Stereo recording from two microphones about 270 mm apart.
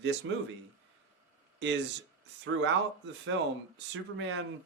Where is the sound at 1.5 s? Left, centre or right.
Right.